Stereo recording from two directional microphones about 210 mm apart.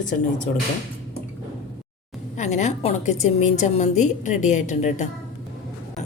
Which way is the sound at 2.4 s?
35° left (ahead or behind).